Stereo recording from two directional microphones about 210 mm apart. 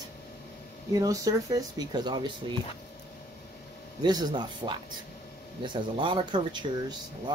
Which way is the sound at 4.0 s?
20° right (ahead or behind).